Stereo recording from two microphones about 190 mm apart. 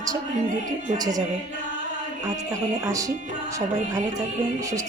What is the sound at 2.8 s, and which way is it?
Speech, 15° right (ahead or behind).